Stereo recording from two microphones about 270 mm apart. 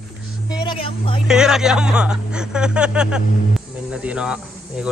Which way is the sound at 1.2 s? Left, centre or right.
Centre.